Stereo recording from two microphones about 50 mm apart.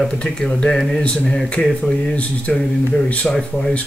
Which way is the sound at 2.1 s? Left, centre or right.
Left.